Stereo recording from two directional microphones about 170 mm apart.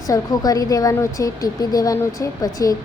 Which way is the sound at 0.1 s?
20° left (ahead or behind).